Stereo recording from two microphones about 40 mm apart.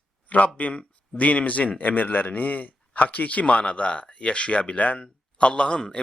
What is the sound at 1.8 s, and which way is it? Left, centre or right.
A man's voice, left.